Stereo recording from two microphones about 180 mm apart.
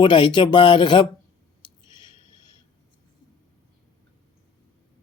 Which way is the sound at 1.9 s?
25° left (ahead or behind).